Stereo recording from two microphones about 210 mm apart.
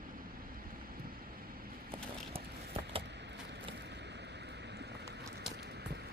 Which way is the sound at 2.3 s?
25° right (ahead or behind).